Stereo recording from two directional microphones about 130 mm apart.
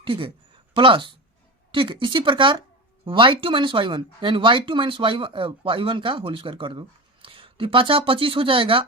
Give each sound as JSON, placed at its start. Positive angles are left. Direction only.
{"t": 0.0, "sound": "a woman's voice", "side_deg": -40}